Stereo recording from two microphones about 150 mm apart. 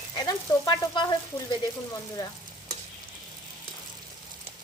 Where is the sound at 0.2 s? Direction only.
25° left (ahead or behind).